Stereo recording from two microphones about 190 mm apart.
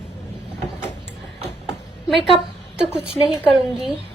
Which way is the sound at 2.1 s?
Centre (ahead or behind).